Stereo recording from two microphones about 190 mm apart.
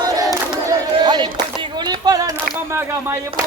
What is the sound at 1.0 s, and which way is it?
Speech, 20° right (ahead or behind).